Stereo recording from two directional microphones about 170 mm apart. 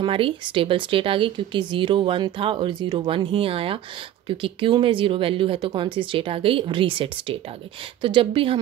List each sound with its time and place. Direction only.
0.0 s speech: 30° right (ahead or behind)